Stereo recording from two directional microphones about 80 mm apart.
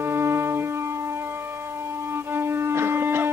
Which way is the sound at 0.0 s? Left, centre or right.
Right.